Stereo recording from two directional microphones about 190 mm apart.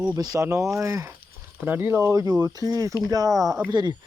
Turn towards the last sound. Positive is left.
turn(degrees=-20)  # may be behind; listen again after turning